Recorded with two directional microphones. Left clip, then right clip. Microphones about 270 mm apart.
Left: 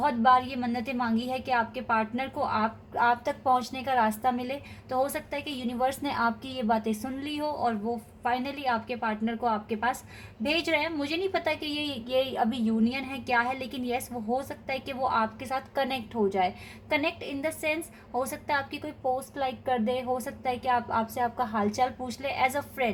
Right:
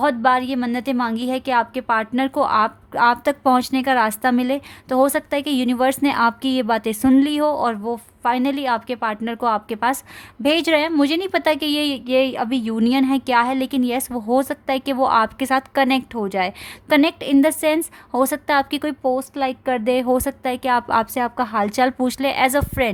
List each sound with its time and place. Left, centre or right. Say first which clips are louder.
0.0 s a woman's voice: right 5 dB; right